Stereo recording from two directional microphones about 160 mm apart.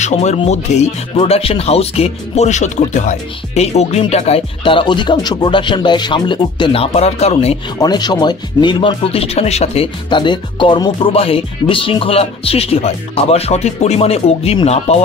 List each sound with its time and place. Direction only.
0.0 s speech: 45° left (ahead or behind)
7.8 s speech: 25° left (ahead or behind)
10.0 s speech: 30° left (ahead or behind)